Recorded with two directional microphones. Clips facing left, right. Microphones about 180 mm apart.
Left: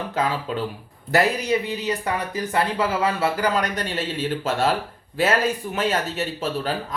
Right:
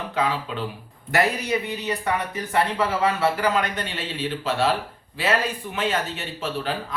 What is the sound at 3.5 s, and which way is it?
Speech, 40° left (ahead or behind).